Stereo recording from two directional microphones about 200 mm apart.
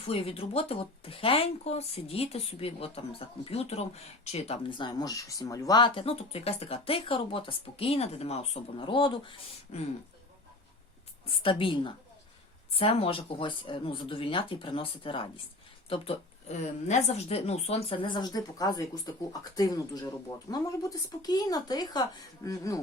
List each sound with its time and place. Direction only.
0.0 s speech: 30° left (ahead or behind)
11.3 s speech: 25° left (ahead or behind)